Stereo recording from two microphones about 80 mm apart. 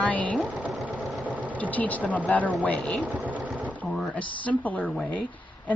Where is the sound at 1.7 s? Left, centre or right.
Centre.